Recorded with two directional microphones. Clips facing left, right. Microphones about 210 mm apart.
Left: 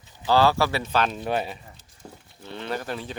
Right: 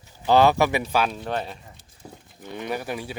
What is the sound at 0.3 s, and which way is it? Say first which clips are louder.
Speech: right 3 dB; 20° right (ahead or behind).